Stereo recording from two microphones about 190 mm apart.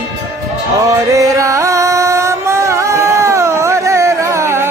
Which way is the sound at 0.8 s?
15° right (ahead or behind).